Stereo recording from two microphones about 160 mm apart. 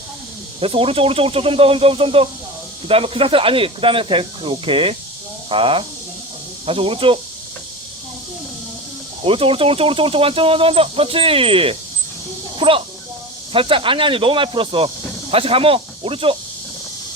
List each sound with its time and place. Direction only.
0.6 s speech: 35° right (ahead or behind)
9.2 s speech: 35° right (ahead or behind)